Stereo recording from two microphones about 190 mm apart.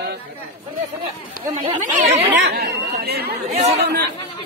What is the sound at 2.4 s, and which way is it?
Speech, 60° right (ahead or behind).